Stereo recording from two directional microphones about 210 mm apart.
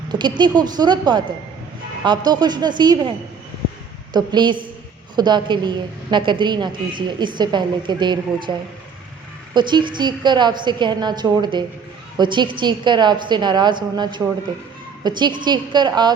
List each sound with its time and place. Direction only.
0.1 s a woman's voice: 20° right (ahead or behind)
4.1 s a woman's voice: 20° right (ahead or behind)
9.6 s a woman's voice: 20° right (ahead or behind)